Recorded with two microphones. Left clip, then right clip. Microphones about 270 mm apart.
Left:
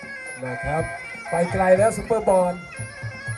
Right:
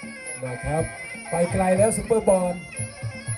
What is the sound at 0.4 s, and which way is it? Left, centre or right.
Speech, centre.